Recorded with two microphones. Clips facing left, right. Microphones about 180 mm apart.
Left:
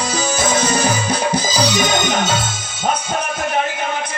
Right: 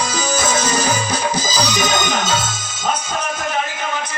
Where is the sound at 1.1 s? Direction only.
60° left (ahead or behind).